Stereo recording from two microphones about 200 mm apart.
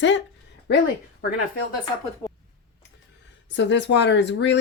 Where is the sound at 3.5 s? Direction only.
60° left (ahead or behind).